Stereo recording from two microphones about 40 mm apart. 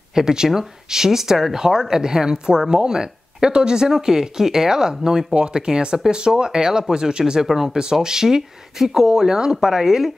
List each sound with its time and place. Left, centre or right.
0.1 s speech: centre
7.4 s speech: centre